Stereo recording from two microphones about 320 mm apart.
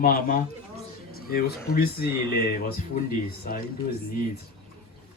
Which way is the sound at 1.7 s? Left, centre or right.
Left.